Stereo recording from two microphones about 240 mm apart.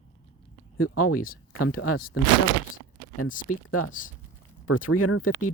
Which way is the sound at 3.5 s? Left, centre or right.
Left.